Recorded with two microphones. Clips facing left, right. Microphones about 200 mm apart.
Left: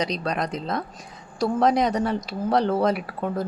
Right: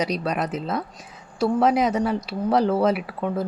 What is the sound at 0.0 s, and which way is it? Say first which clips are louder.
Speech: right 1 dB; 10° right (ahead or behind).